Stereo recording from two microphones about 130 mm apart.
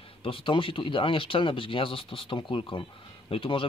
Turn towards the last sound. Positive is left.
turn(degrees=45)  # may be behind; listen again after turning